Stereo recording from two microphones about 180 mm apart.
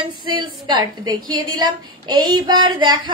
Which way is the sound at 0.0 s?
25° right (ahead or behind).